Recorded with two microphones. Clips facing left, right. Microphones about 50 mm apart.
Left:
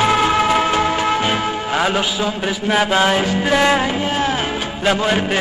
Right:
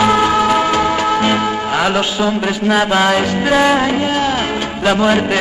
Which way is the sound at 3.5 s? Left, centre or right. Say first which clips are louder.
Right 3 dB; centre.